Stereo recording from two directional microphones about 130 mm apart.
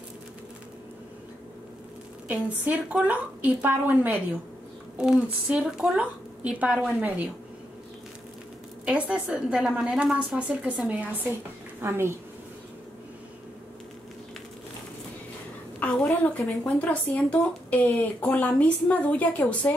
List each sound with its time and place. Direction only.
2.2 s a woman's voice: 10° right (ahead or behind)
8.8 s a woman's voice: 10° right (ahead or behind)
15.8 s speech: 5° left (ahead or behind)